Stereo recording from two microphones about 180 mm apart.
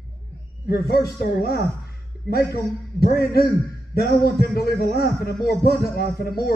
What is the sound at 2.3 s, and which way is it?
Speech, 60° left (ahead or behind).